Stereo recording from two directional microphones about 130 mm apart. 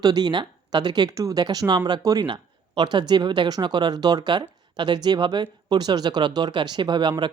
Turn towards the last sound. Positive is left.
turn(degrees=-35)  # may be behind; listen again after turning